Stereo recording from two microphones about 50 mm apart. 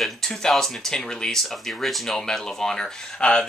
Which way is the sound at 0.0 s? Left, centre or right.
Centre.